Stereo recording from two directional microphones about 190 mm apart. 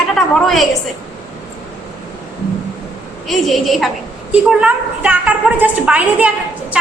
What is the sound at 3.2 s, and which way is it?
A woman's voice, centre (ahead or behind).